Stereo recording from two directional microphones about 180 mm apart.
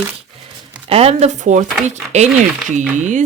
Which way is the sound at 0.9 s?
35° right (ahead or behind).